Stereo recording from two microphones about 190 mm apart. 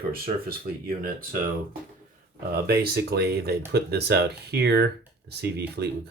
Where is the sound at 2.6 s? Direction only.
55° right (ahead or behind).